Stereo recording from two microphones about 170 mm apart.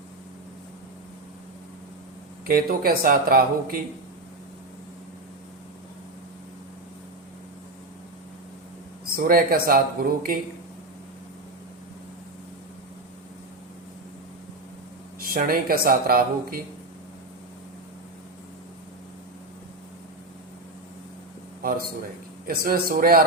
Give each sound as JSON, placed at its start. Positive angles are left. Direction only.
{"t": 2.5, "sound": "speech", "side_deg": -60}
{"t": 9.0, "sound": "speech", "side_deg": -60}
{"t": 15.2, "sound": "speech", "side_deg": -60}
{"t": 22.4, "sound": "speech", "side_deg": -60}